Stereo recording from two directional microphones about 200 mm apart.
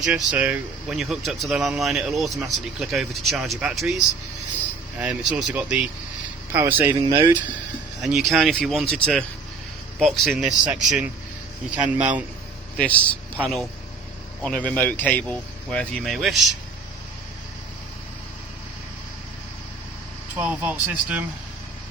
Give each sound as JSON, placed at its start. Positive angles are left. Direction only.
{"t": 0.0, "sound": "speech", "side_deg": -5}
{"t": 7.0, "sound": "speech", "side_deg": -20}
{"t": 8.0, "sound": "speech", "side_deg": 0}
{"t": 12.7, "sound": "a man's voice", "side_deg": 5}
{"t": 20.3, "sound": "speech", "side_deg": -10}